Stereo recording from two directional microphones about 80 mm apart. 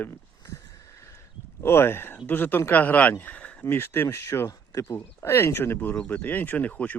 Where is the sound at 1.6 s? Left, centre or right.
Left.